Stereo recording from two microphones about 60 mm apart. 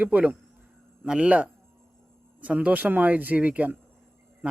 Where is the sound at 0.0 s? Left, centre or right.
Right.